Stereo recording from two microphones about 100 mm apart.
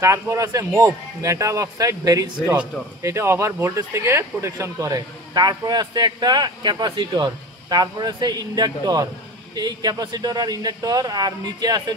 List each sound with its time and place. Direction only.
0.0 s speech: 30° right (ahead or behind)